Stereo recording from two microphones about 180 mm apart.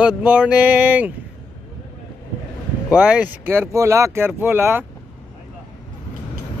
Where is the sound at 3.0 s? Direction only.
5° right (ahead or behind).